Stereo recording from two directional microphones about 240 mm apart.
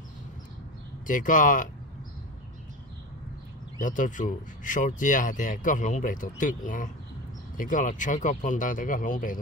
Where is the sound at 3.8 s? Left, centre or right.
Left.